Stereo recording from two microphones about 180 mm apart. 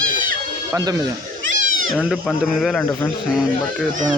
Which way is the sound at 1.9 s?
Centre (ahead or behind).